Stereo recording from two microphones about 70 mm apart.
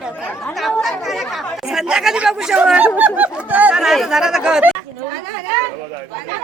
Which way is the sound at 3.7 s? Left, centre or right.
Centre.